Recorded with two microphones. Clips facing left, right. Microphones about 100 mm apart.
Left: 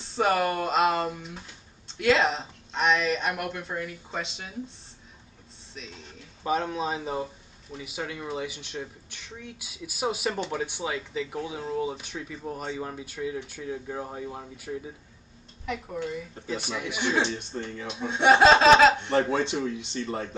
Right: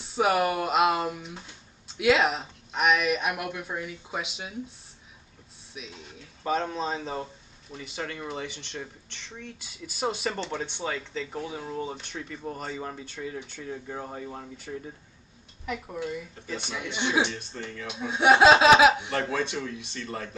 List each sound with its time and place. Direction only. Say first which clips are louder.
0.0 s speech: even; 5° right (ahead or behind)
5.8 s speech: right 1 dB; 5° right (ahead or behind)
17.3 s speech: left 4 dB; 25° left (ahead or behind)
17.8 s speech: even; centre (ahead or behind)
19.1 s speech: left 4 dB; 25° left (ahead or behind)